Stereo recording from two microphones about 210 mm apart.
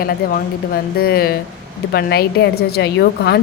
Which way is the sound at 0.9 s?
45° left (ahead or behind).